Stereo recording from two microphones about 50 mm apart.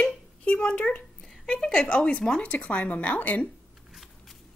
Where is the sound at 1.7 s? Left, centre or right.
Left.